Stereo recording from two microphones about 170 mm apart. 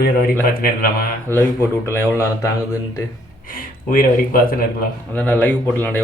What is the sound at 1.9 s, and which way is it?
Speech, 15° left (ahead or behind).